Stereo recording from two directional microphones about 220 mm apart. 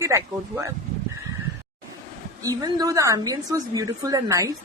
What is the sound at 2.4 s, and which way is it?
A woman's voice, 15° right (ahead or behind).